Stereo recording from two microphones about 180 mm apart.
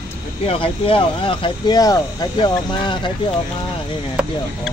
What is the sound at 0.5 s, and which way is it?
Speech, 30° left (ahead or behind).